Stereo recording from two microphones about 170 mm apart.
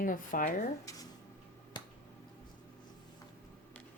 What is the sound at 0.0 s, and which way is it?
Speech, 55° left (ahead or behind).